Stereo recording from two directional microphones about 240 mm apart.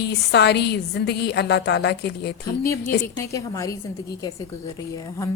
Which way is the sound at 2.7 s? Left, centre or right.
Centre.